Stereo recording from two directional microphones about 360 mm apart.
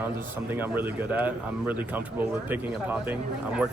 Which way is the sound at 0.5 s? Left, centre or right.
Centre.